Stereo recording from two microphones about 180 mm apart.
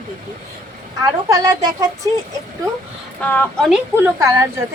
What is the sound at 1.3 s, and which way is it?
Speech, 20° right (ahead or behind).